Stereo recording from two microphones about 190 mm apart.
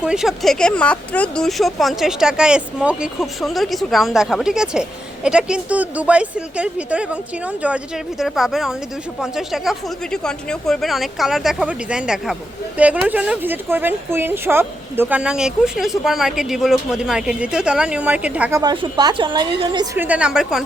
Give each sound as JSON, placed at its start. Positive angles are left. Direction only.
{"t": 0.0, "sound": "speech", "side_deg": -5}
{"t": 18.6, "sound": "a woman's voice", "side_deg": -25}